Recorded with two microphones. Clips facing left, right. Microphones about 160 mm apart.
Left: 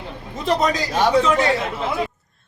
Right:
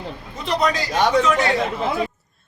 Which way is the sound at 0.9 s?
5° left (ahead or behind).